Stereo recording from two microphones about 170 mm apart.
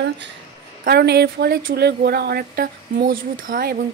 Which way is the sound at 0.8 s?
75° right (ahead or behind).